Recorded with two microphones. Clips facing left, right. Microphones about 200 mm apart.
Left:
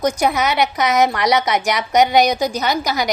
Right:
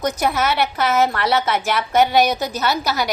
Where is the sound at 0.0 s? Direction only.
10° left (ahead or behind).